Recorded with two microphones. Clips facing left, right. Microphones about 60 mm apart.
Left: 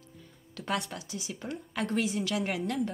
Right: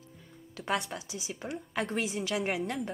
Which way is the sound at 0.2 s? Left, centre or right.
Centre.